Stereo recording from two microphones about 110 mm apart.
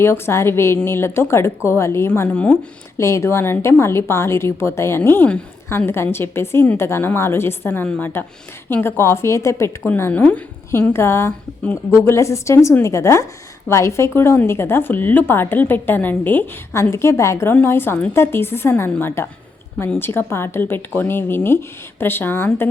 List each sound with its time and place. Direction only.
0.0 s a woman's voice: 25° left (ahead or behind)
2.3 s speech: 10° left (ahead or behind)
3.0 s a woman's voice: 25° left (ahead or behind)
9.8 s a woman's voice: 15° left (ahead or behind)